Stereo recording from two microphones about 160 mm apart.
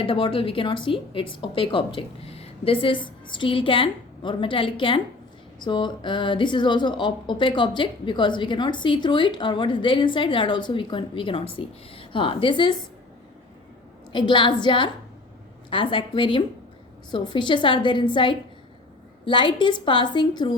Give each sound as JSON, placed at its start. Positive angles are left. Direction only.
{"t": 0.0, "sound": "a woman's voice", "side_deg": 35}
{"t": 14.1, "sound": "a woman's voice", "side_deg": 30}